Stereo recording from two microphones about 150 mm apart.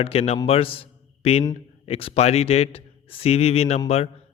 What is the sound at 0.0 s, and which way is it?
A man's voice, 40° left (ahead or behind).